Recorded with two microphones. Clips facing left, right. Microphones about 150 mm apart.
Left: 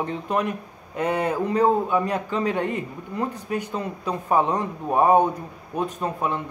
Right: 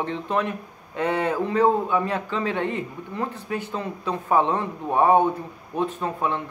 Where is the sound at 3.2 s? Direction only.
15° left (ahead or behind).